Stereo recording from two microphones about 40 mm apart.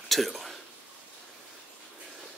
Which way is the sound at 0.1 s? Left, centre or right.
Centre.